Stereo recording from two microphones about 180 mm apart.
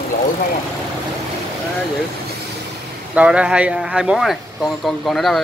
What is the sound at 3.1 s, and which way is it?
Speech, 5° right (ahead or behind).